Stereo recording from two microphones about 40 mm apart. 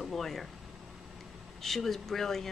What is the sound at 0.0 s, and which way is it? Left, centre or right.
Speech, centre.